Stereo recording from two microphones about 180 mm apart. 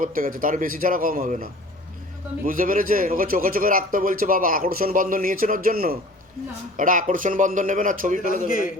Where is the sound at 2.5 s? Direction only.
50° right (ahead or behind).